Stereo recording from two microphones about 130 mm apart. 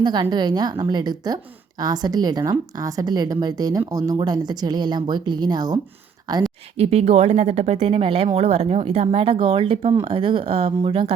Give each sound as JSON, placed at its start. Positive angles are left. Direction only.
{"t": 0.0, "sound": "a woman's voice", "side_deg": -35}
{"t": 6.7, "sound": "a woman's voice", "side_deg": -55}